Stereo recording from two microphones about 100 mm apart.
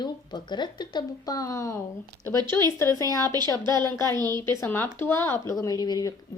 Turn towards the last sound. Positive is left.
turn(degrees=40)  # may be behind; listen again after turning